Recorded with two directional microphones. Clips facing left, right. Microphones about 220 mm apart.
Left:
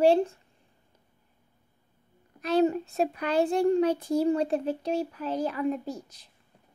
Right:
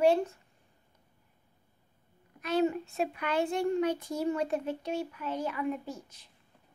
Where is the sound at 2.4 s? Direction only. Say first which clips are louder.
Left 4 dB; 35° left (ahead or behind).